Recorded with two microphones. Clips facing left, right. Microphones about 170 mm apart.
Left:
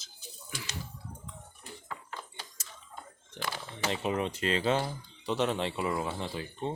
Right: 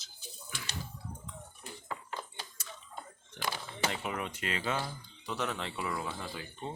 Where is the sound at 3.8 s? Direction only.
25° left (ahead or behind).